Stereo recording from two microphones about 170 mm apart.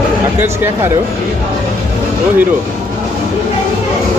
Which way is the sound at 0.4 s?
15° right (ahead or behind).